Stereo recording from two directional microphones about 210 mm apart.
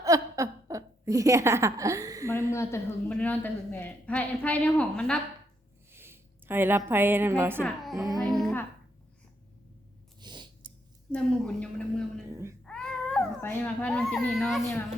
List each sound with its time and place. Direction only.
0.0 s laughter: 15° right (ahead or behind)
2.5 s a woman's voice: 15° left (ahead or behind)
5.9 s a woman's voice: 10° right (ahead or behind)
7.6 s speech: centre (ahead or behind)
8.1 s music: centre (ahead or behind)
10.2 s a sound: 20° right (ahead or behind)
11.1 s a woman's voice: 5° left (ahead or behind)
12.6 s a sound: 5° left (ahead or behind)